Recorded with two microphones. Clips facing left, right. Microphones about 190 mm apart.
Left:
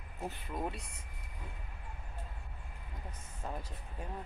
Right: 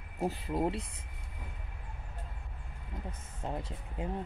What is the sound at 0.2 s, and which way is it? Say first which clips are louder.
Speech: right 7 dB; 30° right (ahead or behind).